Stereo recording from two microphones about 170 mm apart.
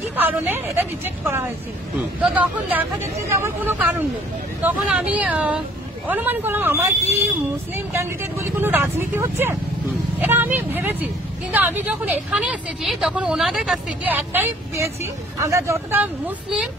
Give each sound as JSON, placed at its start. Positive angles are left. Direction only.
{"t": 0.1, "sound": "a woman's voice", "side_deg": -10}